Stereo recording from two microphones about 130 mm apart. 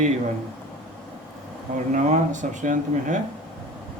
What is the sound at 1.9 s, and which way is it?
Speech, 70° right (ahead or behind).